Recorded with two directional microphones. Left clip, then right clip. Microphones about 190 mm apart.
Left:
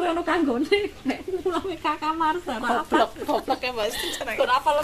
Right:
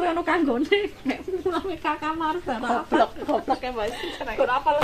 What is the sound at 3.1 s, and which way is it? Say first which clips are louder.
Speech: even; 25° right (ahead or behind).